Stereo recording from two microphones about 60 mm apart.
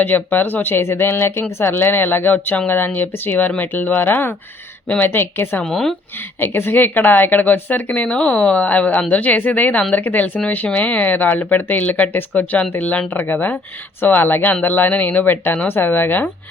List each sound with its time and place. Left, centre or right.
0.0 s speech: left
5.6 s speech: centre
6.1 s a woman's voice: left